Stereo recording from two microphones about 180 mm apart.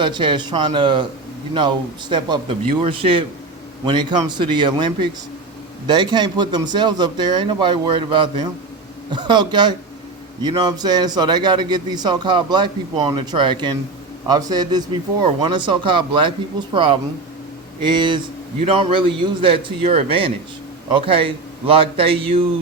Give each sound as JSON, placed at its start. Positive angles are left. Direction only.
{"t": 0.0, "sound": "a man's voice", "side_deg": -25}